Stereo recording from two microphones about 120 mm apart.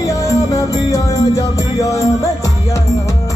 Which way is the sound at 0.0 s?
25° left (ahead or behind).